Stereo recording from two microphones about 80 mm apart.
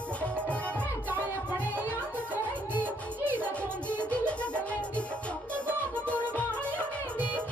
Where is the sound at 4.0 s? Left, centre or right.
Centre.